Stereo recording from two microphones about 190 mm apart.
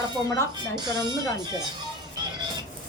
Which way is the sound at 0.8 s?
20° right (ahead or behind).